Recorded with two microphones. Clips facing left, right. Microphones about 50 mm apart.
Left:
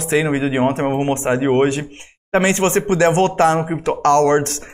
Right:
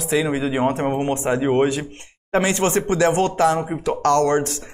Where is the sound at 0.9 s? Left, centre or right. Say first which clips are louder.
Left 3 dB; left.